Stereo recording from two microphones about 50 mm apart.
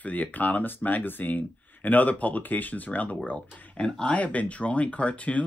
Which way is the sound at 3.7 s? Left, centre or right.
Left.